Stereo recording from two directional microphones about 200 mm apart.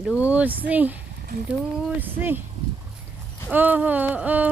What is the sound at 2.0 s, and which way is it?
Speech, 10° right (ahead or behind).